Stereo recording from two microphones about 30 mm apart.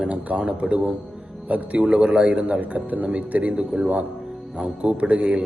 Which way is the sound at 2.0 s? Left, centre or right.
Right.